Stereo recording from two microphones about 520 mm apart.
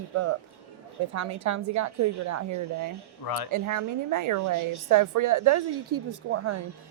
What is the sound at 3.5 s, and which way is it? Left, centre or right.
A woman's voice, right.